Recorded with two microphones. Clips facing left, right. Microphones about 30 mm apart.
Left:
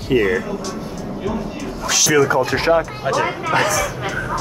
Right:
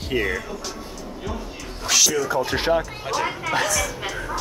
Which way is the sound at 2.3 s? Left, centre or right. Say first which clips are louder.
Left 5 dB; left.